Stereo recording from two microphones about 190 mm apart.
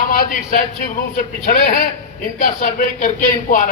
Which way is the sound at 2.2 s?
45° left (ahead or behind).